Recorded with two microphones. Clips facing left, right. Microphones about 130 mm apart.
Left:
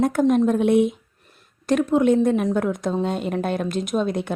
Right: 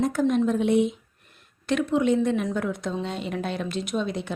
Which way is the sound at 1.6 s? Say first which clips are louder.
Left 5 dB; 45° left (ahead or behind).